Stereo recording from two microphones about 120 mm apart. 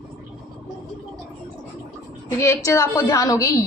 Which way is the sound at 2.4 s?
25° left (ahead or behind).